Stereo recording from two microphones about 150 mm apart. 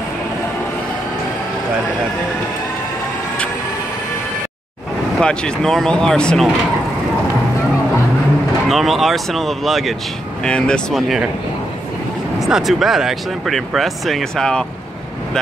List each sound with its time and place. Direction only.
5.2 s speech: 5° left (ahead or behind)
8.6 s speech: centre (ahead or behind)
12.4 s speech: 5° right (ahead or behind)